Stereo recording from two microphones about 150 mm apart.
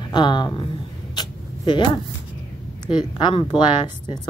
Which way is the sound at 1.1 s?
30° left (ahead or behind).